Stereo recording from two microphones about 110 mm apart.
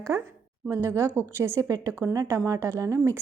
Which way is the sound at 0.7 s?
25° right (ahead or behind).